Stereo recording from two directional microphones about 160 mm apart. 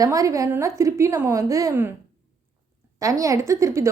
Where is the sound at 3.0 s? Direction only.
20° right (ahead or behind).